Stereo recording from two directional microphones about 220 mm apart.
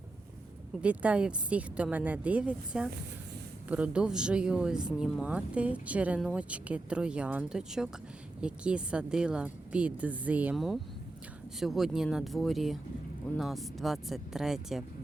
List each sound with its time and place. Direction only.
0.8 s speech: 5° right (ahead or behind)